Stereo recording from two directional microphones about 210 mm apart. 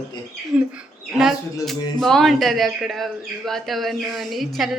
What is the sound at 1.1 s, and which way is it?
Speech, centre (ahead or behind).